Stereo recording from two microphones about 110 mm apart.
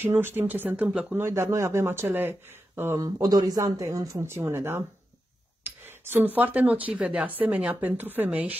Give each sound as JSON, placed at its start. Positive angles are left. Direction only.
{"t": 0.0, "sound": "speech", "side_deg": -20}
{"t": 3.0, "sound": "speech", "side_deg": -35}
{"t": 5.6, "sound": "a sound", "side_deg": -20}
{"t": 6.9, "sound": "speech", "side_deg": -10}